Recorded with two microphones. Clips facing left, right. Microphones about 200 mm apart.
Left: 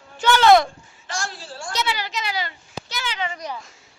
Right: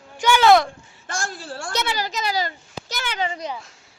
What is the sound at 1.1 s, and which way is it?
A child's voice, 50° right (ahead or behind).